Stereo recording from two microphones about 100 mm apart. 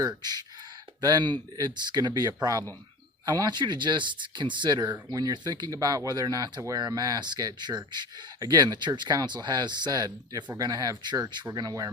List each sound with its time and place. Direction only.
0.0 s speech: 40° right (ahead or behind)